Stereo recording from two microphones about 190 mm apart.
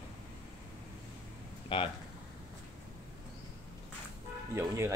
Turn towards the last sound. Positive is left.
turn(degrees=-15)  # may be behind; listen again after turning